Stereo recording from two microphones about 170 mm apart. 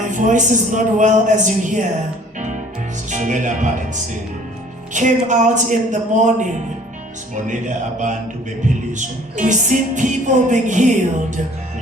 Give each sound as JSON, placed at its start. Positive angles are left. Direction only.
{"t": 0.0, "sound": "music", "side_deg": -45}
{"t": 3.1, "sound": "speech", "side_deg": -45}
{"t": 4.9, "sound": "music", "side_deg": -45}